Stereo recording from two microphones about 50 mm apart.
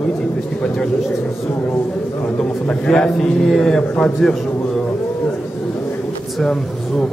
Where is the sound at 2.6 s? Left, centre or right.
Left.